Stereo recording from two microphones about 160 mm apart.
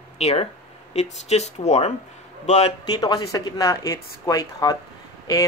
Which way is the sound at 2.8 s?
25° left (ahead or behind).